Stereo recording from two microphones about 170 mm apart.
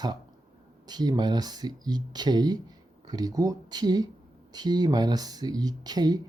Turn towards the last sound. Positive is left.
turn(degrees=-25)  # may be behind; listen again after turning